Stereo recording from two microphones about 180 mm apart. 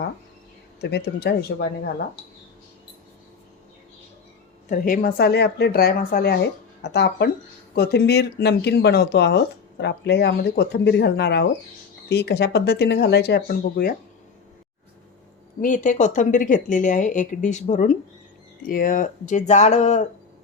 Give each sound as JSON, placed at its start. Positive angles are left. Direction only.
{"t": 0.8, "sound": "speech", "side_deg": 65}
{"t": 4.7, "sound": "speech", "side_deg": 55}
{"t": 6.8, "sound": "speech", "side_deg": 65}
{"t": 15.6, "sound": "speech", "side_deg": 45}